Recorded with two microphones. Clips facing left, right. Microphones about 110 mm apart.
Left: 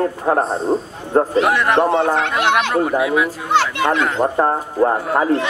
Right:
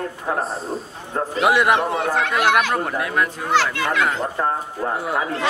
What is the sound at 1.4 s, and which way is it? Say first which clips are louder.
Speech: left 1 dB; 5° right (ahead or behind).